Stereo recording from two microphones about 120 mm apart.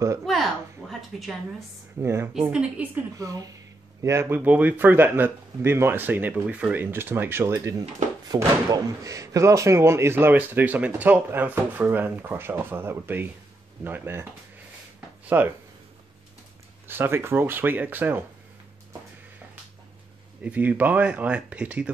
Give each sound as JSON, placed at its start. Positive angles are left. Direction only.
{"t": 0.2, "sound": "a sound", "side_deg": 0}
{"t": 2.0, "sound": "a man's voice", "side_deg": -20}
{"t": 15.2, "sound": "speech", "side_deg": -15}
{"t": 16.8, "sound": "a man's voice", "side_deg": -20}
{"t": 20.4, "sound": "a man's voice", "side_deg": -15}